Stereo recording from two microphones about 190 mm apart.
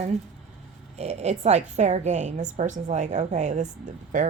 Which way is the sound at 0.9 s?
35° right (ahead or behind).